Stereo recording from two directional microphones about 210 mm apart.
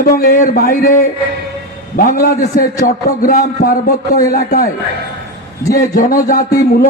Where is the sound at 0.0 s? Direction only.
40° left (ahead or behind).